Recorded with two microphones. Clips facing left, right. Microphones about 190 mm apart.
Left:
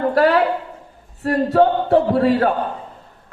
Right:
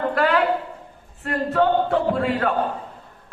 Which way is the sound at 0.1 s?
35° left (ahead or behind).